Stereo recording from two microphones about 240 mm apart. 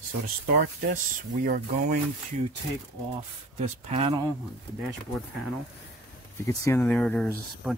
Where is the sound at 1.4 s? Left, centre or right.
Right.